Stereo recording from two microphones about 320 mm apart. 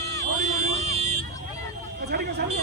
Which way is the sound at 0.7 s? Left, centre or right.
Centre.